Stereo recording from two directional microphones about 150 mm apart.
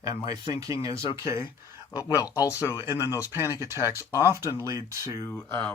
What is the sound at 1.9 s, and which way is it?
Speech, 25° left (ahead or behind).